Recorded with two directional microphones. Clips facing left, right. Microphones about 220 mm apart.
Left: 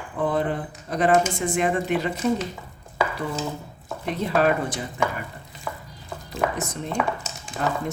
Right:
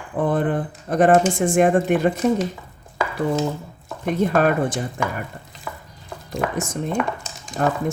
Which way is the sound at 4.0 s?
50° right (ahead or behind).